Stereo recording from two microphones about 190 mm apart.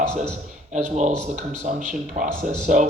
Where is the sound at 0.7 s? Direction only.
40° right (ahead or behind).